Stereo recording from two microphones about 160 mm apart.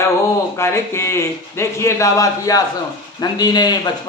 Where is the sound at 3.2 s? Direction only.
25° left (ahead or behind).